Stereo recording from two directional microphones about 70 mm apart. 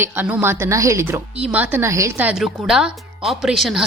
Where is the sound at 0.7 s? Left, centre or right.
Right.